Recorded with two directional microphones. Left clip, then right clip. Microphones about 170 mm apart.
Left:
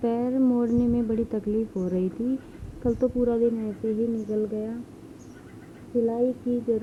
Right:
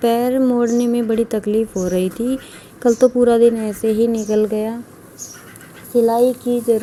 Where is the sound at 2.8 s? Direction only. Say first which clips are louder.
Right 12 dB; 30° right (ahead or behind).